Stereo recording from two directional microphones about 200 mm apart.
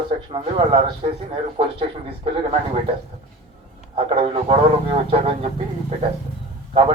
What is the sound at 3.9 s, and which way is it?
A man's voice, 30° right (ahead or behind).